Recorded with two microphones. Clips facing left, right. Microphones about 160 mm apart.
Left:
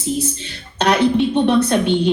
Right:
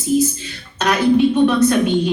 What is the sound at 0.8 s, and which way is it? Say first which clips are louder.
Speech: right 1 dB; 30° left (ahead or behind).